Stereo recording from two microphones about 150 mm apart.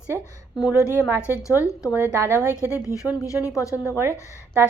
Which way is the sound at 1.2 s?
20° left (ahead or behind).